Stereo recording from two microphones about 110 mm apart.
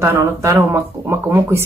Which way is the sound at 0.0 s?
25° right (ahead or behind).